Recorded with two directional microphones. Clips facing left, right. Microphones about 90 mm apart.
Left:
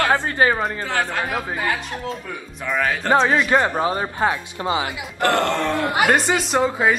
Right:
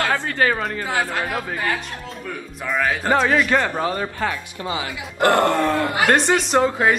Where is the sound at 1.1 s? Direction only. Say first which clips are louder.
Even; 5° left (ahead or behind).